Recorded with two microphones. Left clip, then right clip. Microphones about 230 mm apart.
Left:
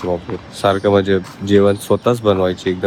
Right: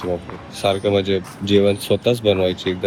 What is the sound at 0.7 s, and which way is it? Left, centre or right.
Speech, left.